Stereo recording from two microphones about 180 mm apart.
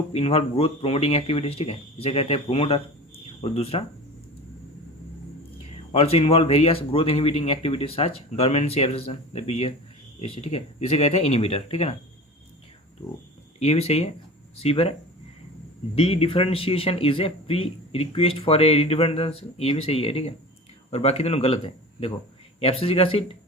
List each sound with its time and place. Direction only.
0.1 s speech: 35° left (ahead or behind)
5.9 s speech: 35° left (ahead or behind)
13.6 s speech: 35° left (ahead or behind)
16.0 s speech: 30° left (ahead or behind)